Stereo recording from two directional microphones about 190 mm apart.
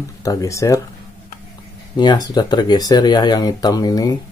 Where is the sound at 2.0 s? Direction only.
25° left (ahead or behind).